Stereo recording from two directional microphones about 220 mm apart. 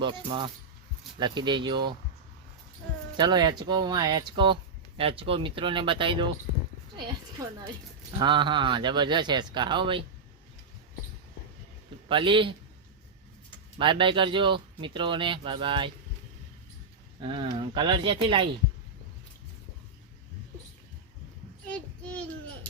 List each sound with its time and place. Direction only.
0.0 s speech: 20° right (ahead or behind)
3.2 s speech: 20° right (ahead or behind)
8.2 s speech: 20° right (ahead or behind)
12.0 s speech: 20° right (ahead or behind)
13.7 s speech: 20° right (ahead or behind)
17.2 s speech: 20° right (ahead or behind)
21.7 s child singing: 5° left (ahead or behind)